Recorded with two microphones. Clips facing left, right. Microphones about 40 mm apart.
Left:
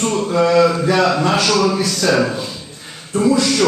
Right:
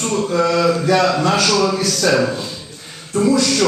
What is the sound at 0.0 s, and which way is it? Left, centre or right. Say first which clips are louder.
Speech: left 1 dB; centre.